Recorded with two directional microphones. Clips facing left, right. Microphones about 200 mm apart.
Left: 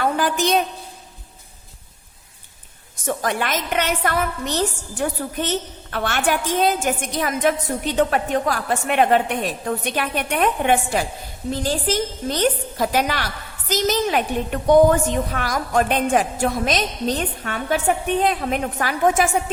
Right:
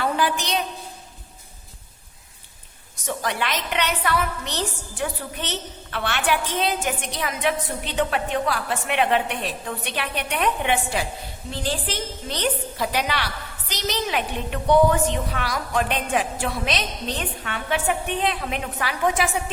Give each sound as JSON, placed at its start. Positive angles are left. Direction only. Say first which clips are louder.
{"t": 0.0, "sound": "a woman's voice", "louder": "left 3 dB", "side_deg": 45}
{"t": 2.9, "sound": "a woman's voice", "louder": "left 4 dB", "side_deg": 50}